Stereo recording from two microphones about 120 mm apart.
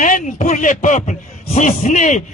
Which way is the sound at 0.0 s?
90° left.